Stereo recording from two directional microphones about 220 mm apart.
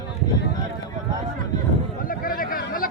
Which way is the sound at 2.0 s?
40° left (ahead or behind).